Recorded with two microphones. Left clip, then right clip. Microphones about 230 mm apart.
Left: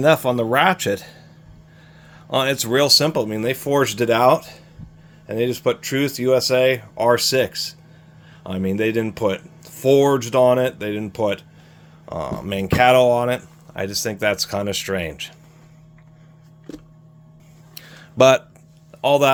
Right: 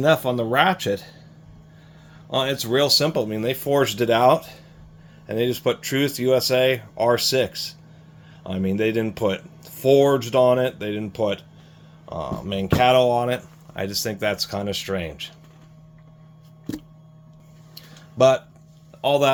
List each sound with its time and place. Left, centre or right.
0.0 s speech: left
2.3 s speech: left
17.7 s a sound: left
19.0 s speech: left